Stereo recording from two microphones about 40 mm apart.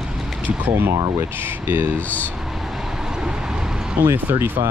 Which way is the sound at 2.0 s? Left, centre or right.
Left.